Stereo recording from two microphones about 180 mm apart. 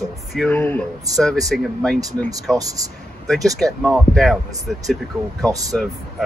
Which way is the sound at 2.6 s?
20° right (ahead or behind).